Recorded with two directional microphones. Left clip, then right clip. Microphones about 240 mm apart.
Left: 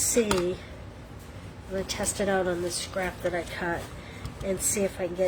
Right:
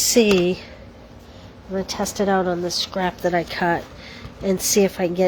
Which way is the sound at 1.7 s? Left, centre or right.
Right.